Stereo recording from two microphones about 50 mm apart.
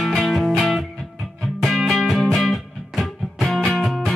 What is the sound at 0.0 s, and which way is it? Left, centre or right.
Music, centre.